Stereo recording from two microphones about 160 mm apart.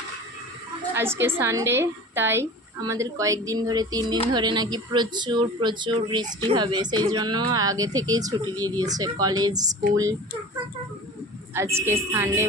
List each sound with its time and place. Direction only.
0.9 s a woman's voice: 15° right (ahead or behind)
11.5 s speech: 15° right (ahead or behind)